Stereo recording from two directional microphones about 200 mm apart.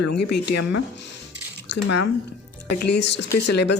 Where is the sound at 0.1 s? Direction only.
55° left (ahead or behind).